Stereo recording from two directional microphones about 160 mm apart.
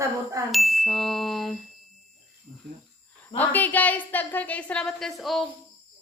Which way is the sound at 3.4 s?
10° left (ahead or behind).